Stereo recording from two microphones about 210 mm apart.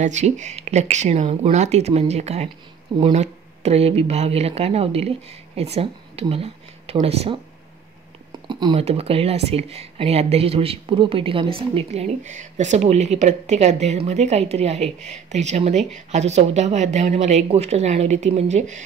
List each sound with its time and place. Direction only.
0.0 s speech: 35° right (ahead or behind)